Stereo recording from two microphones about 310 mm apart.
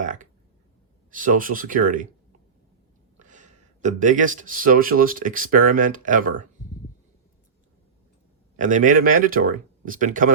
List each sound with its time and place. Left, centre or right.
0.0 s a sound: right
1.1 s speech: right
3.2 s speech: right
8.5 s speech: right